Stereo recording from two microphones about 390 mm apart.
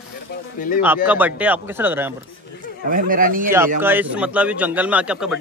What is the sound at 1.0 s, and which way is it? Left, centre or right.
A man's voice, centre.